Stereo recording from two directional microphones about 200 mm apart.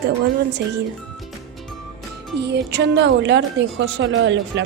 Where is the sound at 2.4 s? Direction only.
55° right (ahead or behind).